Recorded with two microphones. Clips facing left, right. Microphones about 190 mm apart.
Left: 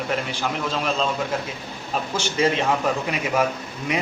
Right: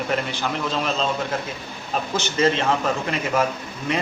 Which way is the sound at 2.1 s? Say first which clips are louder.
Right 1 dB; 10° left (ahead or behind).